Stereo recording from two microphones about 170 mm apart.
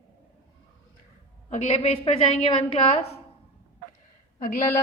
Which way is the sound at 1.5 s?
40° left (ahead or behind).